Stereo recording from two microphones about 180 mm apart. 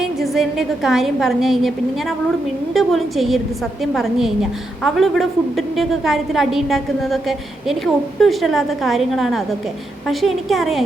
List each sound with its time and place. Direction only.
0.0 s a woman's voice: centre (ahead or behind)